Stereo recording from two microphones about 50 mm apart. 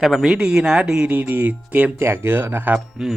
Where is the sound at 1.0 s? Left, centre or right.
Right.